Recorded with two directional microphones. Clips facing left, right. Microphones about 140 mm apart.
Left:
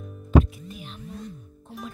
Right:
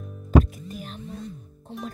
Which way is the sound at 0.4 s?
40° right (ahead or behind).